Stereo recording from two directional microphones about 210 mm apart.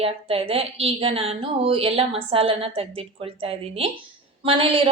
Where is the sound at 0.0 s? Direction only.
25° right (ahead or behind).